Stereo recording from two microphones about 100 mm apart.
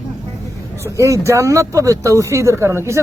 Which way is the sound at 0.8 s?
30° right (ahead or behind).